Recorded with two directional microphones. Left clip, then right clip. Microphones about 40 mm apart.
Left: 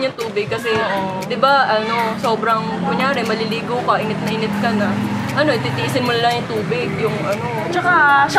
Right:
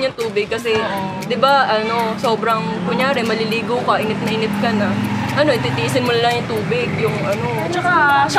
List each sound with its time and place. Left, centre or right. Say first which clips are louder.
1.4 s speech: even; right
5.4 s speech: right 1 dB; right
7.8 s a woman's voice: left 1 dB; right